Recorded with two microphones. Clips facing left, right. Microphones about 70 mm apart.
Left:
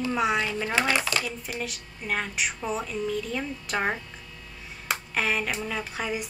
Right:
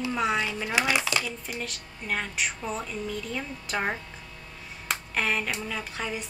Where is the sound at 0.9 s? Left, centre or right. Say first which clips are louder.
Left 1 dB; centre.